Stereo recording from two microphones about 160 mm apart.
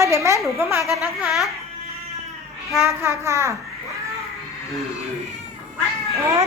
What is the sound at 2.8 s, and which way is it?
Speech, 15° right (ahead or behind).